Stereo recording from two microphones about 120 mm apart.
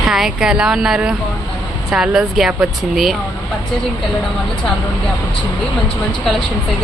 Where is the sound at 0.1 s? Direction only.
5° right (ahead or behind).